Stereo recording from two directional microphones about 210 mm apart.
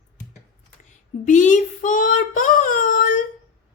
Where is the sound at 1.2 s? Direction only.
35° left (ahead or behind).